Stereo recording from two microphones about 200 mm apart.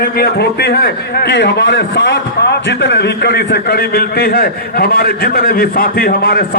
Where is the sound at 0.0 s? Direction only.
50° left (ahead or behind).